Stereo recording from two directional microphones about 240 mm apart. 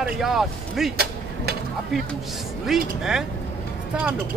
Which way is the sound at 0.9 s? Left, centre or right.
Right.